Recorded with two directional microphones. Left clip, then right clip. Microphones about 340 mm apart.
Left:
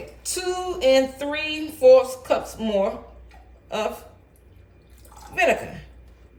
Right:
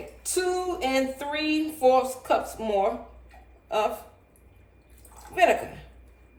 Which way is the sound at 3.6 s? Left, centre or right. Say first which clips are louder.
Right 1 dB; centre.